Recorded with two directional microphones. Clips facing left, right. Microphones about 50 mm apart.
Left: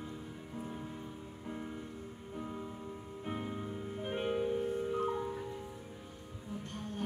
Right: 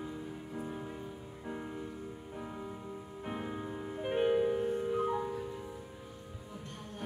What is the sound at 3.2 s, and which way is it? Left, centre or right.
Music, centre.